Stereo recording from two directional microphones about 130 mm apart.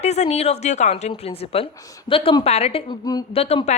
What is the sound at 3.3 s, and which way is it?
Speech, 50° left (ahead or behind).